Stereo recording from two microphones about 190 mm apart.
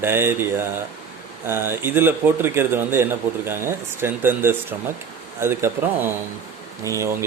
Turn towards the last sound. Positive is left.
turn(degrees=-15)  # may be behind; listen again after turning